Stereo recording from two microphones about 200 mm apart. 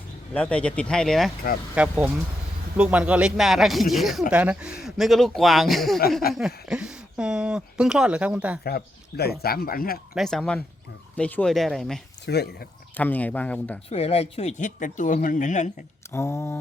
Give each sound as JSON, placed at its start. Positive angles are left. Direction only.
{"t": 0.3, "sound": "speech", "side_deg": 5}
{"t": 8.6, "sound": "speech", "side_deg": 50}
{"t": 10.2, "sound": "speech", "side_deg": 0}
{"t": 12.2, "sound": "speech", "side_deg": 55}
{"t": 13.0, "sound": "speech", "side_deg": 10}
{"t": 13.9, "sound": "speech", "side_deg": 30}
{"t": 16.1, "sound": "speech", "side_deg": 15}